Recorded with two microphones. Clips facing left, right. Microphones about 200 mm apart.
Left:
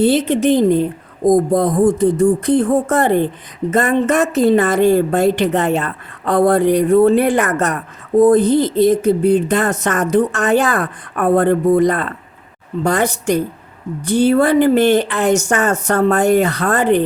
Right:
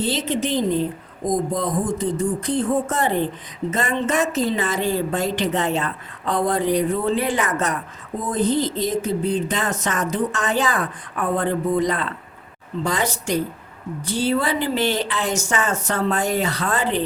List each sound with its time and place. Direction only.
0.0 s a woman's voice: 60° left (ahead or behind)